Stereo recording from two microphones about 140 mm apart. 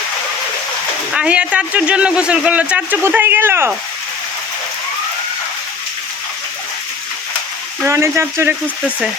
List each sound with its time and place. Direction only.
1.1 s speech: 5° right (ahead or behind)
7.9 s speech: 20° right (ahead or behind)